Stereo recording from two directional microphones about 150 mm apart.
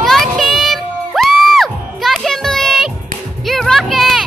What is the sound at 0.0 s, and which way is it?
Crowd, centre (ahead or behind).